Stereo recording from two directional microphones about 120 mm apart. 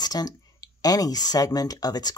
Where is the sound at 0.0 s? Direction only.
35° left (ahead or behind).